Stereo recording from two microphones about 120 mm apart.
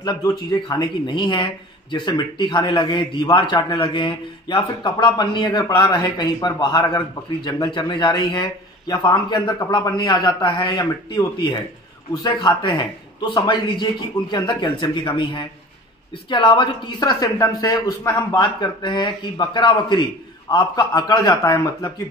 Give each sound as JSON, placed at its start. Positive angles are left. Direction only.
{"t": 0.0, "sound": "speech", "side_deg": 35}